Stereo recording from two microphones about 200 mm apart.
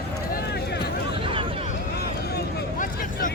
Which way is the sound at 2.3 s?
40° left (ahead or behind).